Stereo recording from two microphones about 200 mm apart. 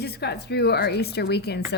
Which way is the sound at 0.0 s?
55° left (ahead or behind).